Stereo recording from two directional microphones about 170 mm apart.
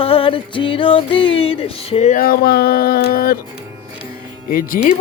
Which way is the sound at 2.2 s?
60° left (ahead or behind).